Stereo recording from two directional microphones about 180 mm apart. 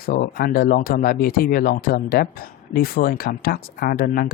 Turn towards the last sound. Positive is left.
turn(degrees=55)  # may be behind; listen again after turning